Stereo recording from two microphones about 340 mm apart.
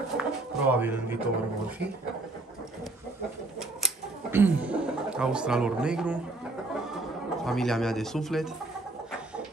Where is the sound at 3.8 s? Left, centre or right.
Centre.